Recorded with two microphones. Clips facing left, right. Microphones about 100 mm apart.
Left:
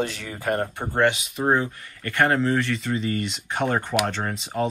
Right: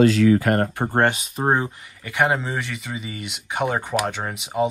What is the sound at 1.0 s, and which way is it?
Speech, 40° right (ahead or behind).